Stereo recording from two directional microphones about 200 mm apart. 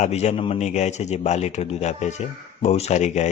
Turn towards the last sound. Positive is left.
turn(degrees=35)  # may be behind; listen again after turning